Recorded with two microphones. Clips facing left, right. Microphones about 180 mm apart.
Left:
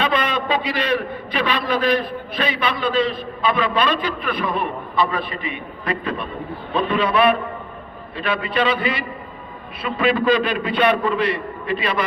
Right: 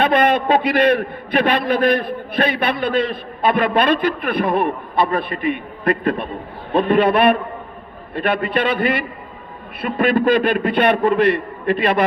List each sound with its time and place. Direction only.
0.0 s a man's voice: 60° right (ahead or behind)